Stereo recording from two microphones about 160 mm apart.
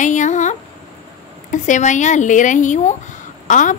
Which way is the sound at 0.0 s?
50° left (ahead or behind).